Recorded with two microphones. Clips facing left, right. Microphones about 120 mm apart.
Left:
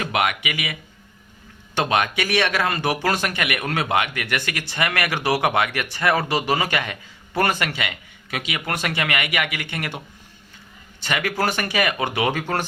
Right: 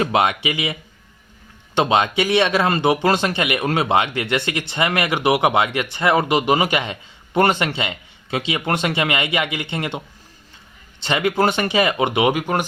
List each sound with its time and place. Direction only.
0.0 s speech: 30° right (ahead or behind)
11.0 s speech: 25° right (ahead or behind)